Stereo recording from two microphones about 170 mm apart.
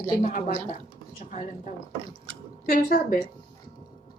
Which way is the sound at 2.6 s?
55° left (ahead or behind).